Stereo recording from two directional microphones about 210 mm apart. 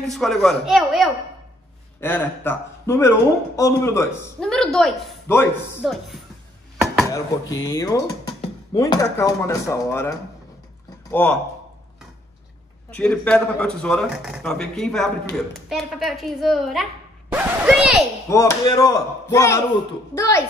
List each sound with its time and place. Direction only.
0.0 s a man's voice: centre (ahead or behind)
2.0 s speech: 10° left (ahead or behind)
4.5 s a man's voice: centre (ahead or behind)
7.1 s speech: 15° left (ahead or behind)
12.9 s a man's voice: 5° left (ahead or behind)
18.3 s speech: 15° left (ahead or behind)